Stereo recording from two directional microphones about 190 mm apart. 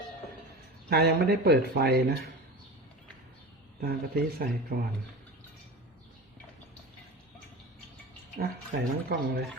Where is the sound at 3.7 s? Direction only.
55° right (ahead or behind).